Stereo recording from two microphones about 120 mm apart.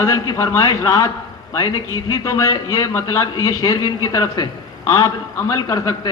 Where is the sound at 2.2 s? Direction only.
25° left (ahead or behind).